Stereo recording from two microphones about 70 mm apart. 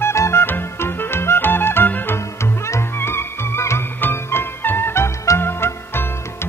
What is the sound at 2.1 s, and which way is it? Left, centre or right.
Music, left.